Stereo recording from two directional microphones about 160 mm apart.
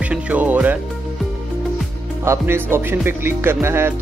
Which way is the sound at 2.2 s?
15° right (ahead or behind).